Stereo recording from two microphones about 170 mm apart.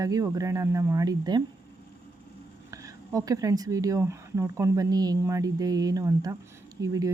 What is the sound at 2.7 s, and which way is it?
Speech, 20° right (ahead or behind).